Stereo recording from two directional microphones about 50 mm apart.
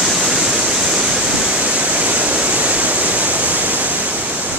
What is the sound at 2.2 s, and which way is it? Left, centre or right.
Waterfall, right.